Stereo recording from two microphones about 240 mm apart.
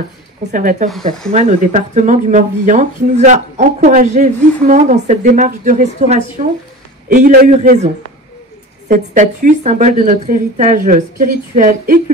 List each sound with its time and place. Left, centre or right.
0.5 s speech: right